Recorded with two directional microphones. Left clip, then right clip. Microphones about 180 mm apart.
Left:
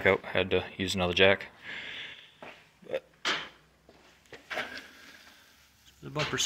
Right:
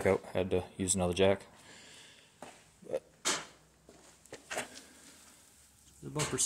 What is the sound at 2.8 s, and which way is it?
Creak, 20° right (ahead or behind).